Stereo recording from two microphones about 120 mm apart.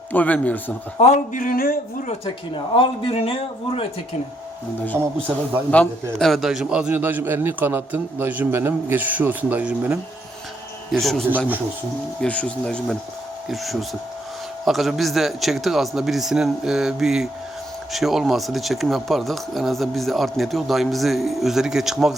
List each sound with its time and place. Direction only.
0.1 s speech: 15° left (ahead or behind)
0.9 s a man's voice: 75° left (ahead or behind)
2.7 s speech: 45° left (ahead or behind)
4.9 s a man's voice: 20° right (ahead or behind)
5.7 s a man's voice: 10° left (ahead or behind); by 10.0 s 10° right (ahead or behind)
10.9 s speech: centre (ahead or behind)
11.3 s a man's voice: 15° right (ahead or behind)
12.2 s speech: 10° left (ahead or behind)